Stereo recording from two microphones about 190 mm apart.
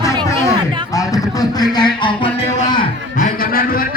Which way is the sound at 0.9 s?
20° left (ahead or behind).